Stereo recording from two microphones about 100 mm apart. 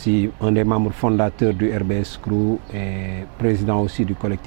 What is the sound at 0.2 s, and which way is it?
Speech, 15° right (ahead or behind).